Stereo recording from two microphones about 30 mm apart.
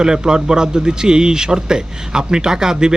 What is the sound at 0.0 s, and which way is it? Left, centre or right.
Speech, right.